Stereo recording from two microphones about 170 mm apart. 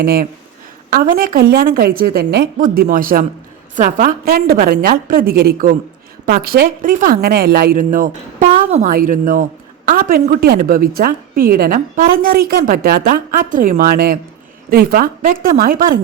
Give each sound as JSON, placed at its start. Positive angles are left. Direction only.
{"t": 0.0, "sound": "a woman's voice", "side_deg": -65}